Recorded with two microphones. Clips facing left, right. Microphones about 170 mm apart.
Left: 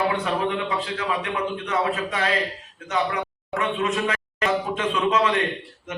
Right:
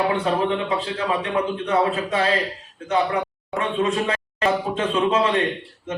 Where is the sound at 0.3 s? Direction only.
30° right (ahead or behind).